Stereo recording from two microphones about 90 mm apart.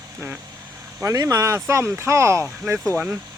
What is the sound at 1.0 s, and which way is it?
Speech, 40° right (ahead or behind).